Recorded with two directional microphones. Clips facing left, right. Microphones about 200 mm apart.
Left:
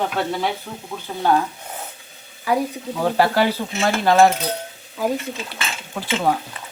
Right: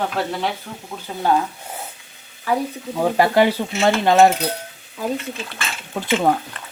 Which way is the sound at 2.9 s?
15° right (ahead or behind).